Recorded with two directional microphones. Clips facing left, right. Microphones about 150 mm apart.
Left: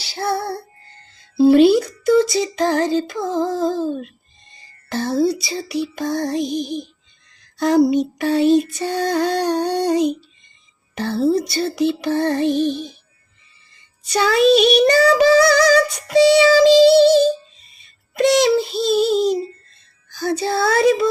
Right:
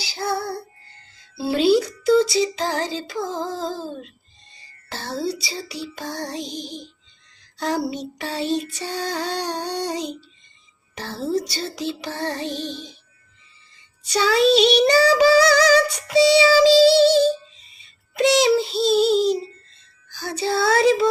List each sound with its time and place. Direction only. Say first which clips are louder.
0.1 s music: left 3 dB; 60° left (ahead or behind)
1.4 s female singing: left 7 dB; 55° left (ahead or behind)
7.9 s child singing: left 11 dB; 55° left (ahead or behind)
14.1 s female singing: left 3 dB; 50° left (ahead or behind)
16.8 s music: left 3 dB; centre (ahead or behind)
18.4 s female singing: left 1 dB; 50° left (ahead or behind)